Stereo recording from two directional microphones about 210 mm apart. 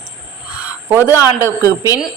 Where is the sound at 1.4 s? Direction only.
15° right (ahead or behind).